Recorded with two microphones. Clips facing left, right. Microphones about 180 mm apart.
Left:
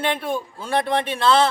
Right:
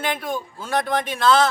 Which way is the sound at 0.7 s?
30° left (ahead or behind).